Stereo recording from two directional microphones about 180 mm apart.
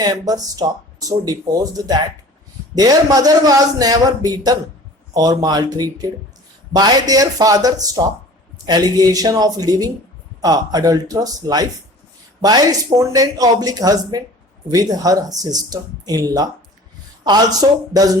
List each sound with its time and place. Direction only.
0.0 s a man's voice: 20° right (ahead or behind)